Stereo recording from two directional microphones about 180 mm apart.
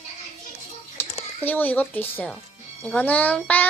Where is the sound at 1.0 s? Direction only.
10° left (ahead or behind).